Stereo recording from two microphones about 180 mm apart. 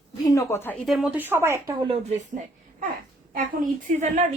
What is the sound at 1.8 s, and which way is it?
Speech, 35° right (ahead or behind).